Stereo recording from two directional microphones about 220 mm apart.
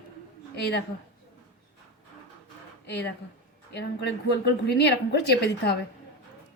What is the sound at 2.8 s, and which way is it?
Speech, 50° left (ahead or behind).